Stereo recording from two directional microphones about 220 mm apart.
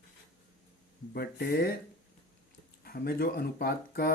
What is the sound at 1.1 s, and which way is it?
Speech, 45° left (ahead or behind).